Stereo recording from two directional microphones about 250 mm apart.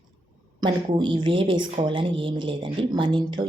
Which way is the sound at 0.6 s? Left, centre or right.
Centre.